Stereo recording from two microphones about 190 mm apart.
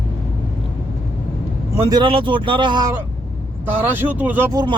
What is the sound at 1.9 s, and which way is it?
Speech, 25° right (ahead or behind).